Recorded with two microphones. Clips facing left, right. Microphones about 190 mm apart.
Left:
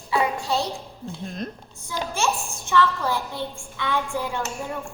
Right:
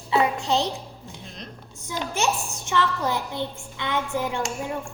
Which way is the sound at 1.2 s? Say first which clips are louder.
Left 11 dB; 50° left (ahead or behind).